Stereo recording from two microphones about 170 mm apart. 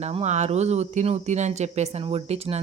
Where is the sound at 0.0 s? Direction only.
40° right (ahead or behind).